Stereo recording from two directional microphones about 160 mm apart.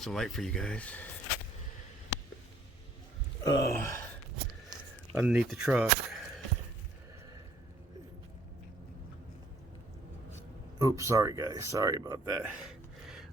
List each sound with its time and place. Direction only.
0.0 s speech: centre (ahead or behind)
3.4 s speech: 20° left (ahead or behind)
5.1 s speech: 5° right (ahead or behind)
10.8 s speech: 20° right (ahead or behind)
12.4 s gasp: 5° right (ahead or behind)